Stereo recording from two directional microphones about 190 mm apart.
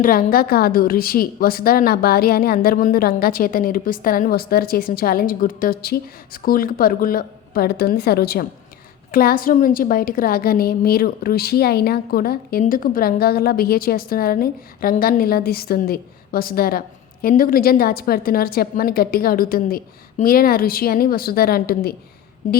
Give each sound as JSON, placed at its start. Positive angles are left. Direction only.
{"t": 0.0, "sound": "a woman's voice", "side_deg": 50}